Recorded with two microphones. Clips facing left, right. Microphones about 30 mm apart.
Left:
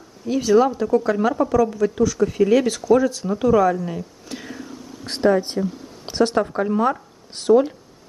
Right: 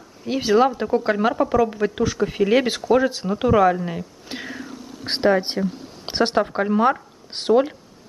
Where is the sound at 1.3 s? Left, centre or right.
Right.